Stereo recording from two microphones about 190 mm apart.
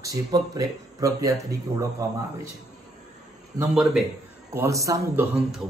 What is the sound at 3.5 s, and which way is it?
Speech, 20° right (ahead or behind).